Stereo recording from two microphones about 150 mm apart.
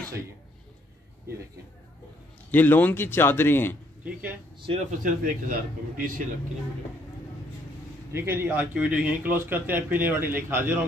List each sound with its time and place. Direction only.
2.5 s speech: 10° left (ahead or behind)
4.0 s speech: 10° right (ahead or behind)
5.0 s a man's voice: 70° right (ahead or behind)
8.1 s a man's voice: 15° right (ahead or behind)